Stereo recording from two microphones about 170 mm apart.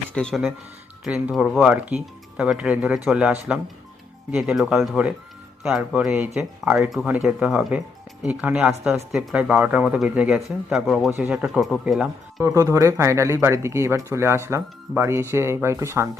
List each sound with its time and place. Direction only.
0.1 s speech: 5° left (ahead or behind)
12.4 s speech: 15° right (ahead or behind)